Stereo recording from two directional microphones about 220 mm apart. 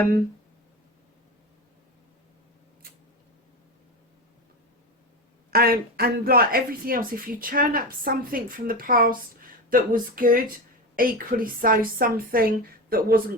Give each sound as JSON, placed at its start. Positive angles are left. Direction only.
{"t": 5.5, "sound": "speech", "side_deg": -45}